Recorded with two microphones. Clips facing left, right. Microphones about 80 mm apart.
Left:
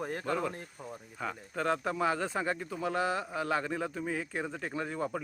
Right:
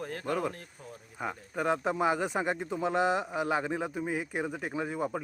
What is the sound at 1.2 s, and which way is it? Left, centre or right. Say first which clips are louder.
Speech: right 2 dB; centre.